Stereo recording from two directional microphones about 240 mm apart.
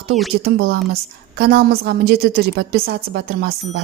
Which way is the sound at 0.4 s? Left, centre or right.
Right.